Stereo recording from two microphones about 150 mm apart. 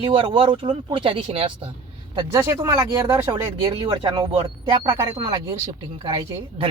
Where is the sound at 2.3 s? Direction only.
20° right (ahead or behind).